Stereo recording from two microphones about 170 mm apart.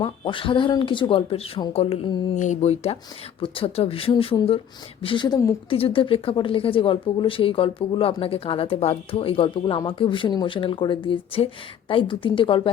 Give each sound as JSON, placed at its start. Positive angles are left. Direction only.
{"t": 0.0, "sound": "speech", "side_deg": 30}
{"t": 5.7, "sound": "speech", "side_deg": 35}